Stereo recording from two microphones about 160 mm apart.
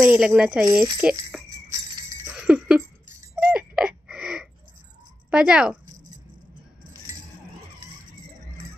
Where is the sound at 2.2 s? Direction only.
10° right (ahead or behind).